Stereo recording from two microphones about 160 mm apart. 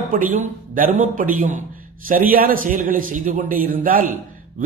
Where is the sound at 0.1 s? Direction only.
50° right (ahead or behind).